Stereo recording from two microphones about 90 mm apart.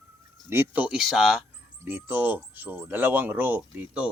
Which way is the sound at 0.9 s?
5° right (ahead or behind).